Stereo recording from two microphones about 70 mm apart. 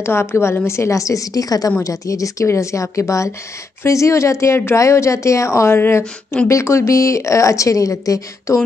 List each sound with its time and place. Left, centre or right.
0.0 s a woman's voice: left
1.8 s a woman's voice: left